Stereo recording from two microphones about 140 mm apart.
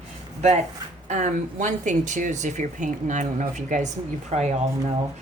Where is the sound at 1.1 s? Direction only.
60° right (ahead or behind).